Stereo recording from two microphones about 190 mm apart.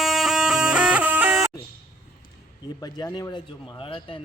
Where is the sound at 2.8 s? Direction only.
20° left (ahead or behind).